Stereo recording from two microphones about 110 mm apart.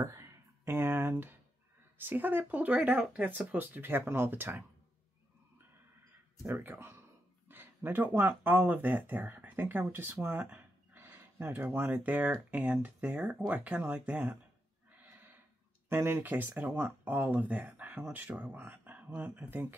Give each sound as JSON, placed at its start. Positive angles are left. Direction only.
{"t": 0.0, "sound": "speech", "side_deg": -25}
{"t": 6.4, "sound": "speech", "side_deg": -20}
{"t": 15.0, "sound": "a sound", "side_deg": -15}
{"t": 15.9, "sound": "speech", "side_deg": -20}